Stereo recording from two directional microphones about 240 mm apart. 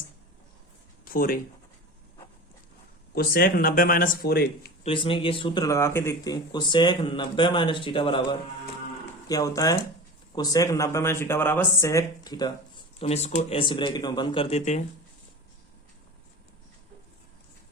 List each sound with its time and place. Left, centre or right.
1.0 s speech: left
3.2 s speech: left
4.8 s speech: left